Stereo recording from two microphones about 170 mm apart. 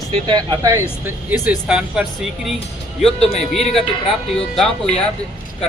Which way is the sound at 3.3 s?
35° left (ahead or behind).